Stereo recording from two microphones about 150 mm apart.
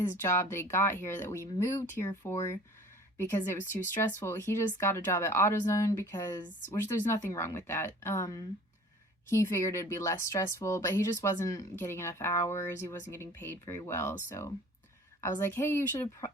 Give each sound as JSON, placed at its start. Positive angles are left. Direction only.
{"t": 0.2, "sound": "speech", "side_deg": 15}